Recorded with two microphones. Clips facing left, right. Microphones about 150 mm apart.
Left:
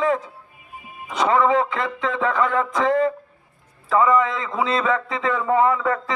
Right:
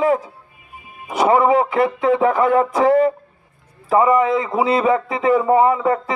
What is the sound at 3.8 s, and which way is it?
A man's voice, 20° right (ahead or behind).